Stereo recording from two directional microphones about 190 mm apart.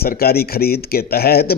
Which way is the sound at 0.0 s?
55° left (ahead or behind).